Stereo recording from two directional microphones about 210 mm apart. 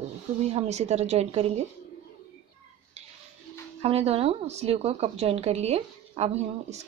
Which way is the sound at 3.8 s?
30° right (ahead or behind).